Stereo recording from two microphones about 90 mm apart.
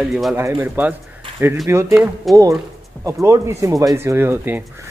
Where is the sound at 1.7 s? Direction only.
30° right (ahead or behind).